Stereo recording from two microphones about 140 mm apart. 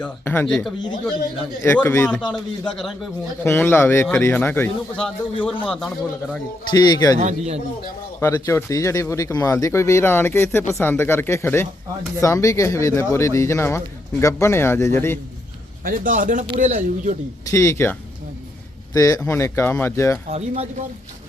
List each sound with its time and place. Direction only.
0.4 s speech: centre (ahead or behind)
1.6 s speech: 20° left (ahead or behind)
2.3 s speech: centre (ahead or behind)
3.4 s a man's voice: 15° left (ahead or behind)
6.7 s speech: 30° left (ahead or behind)
7.2 s a man's voice: 55° right (ahead or behind)
8.2 s speech: 20° left (ahead or behind)
15.8 s a man's voice: 80° right; by 17.2 s 60° right (ahead or behind)
17.4 s speech: 20° left (ahead or behind)
18.9 s a man's voice: 25° left (ahead or behind)
20.3 s a man's voice: 50° right (ahead or behind)